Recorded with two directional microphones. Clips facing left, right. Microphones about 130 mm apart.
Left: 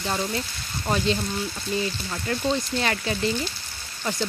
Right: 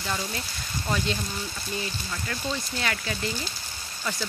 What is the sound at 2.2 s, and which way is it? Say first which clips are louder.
Speech: left 8 dB; 35° left (ahead or behind).